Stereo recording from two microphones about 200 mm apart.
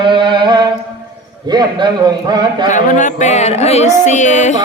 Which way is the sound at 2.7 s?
40° left (ahead or behind).